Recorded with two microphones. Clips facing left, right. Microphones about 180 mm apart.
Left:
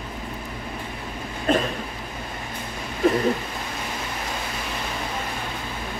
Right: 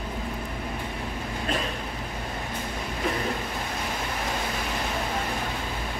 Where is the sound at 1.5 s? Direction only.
45° left (ahead or behind).